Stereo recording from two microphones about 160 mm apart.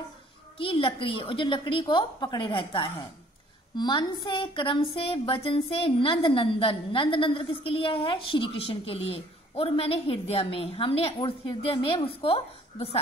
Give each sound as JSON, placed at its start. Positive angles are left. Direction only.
{"t": 0.6, "sound": "a woman's voice", "side_deg": 35}